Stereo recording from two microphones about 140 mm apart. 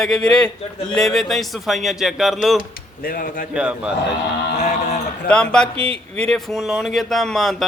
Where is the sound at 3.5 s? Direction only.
5° right (ahead or behind).